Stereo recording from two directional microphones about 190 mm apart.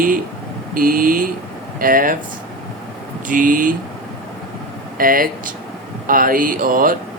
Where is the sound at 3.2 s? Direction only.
45° right (ahead or behind).